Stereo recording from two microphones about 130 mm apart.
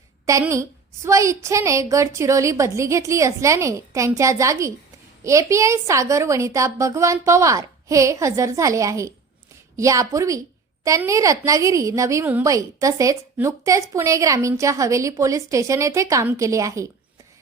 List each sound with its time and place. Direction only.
0.3 s a woman's voice: 25° right (ahead or behind)
12.2 s a woman's voice: 15° right (ahead or behind)
12.5 s a woman's voice: 25° right (ahead or behind)